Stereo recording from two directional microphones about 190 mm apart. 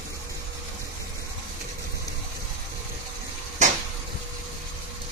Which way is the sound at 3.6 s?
40° right (ahead or behind).